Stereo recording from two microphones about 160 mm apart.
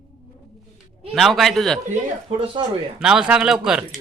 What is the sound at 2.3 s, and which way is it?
Speech, 40° right (ahead or behind).